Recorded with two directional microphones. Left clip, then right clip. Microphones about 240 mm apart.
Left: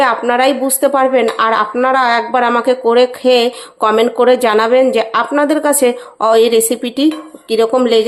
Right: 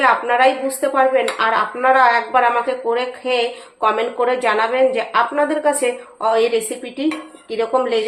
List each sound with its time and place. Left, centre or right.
0.0 s speech: left